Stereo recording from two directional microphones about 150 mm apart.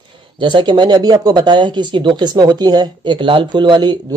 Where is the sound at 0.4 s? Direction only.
30° right (ahead or behind).